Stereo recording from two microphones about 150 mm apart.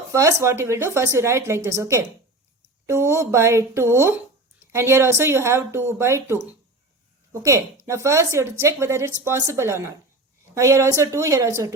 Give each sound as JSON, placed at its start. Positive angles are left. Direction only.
{"t": 0.1, "sound": "a woman's voice", "side_deg": -20}